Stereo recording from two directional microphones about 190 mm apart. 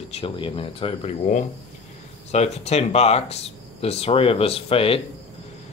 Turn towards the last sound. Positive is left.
turn(degrees=30)  # may be behind; listen again after turning